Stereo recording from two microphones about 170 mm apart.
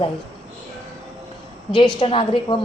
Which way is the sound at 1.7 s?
30° left (ahead or behind).